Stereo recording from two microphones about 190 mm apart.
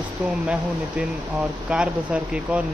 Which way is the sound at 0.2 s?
5° right (ahead or behind).